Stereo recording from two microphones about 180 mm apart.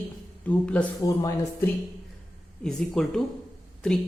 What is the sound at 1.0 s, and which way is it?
Speech, 20° left (ahead or behind).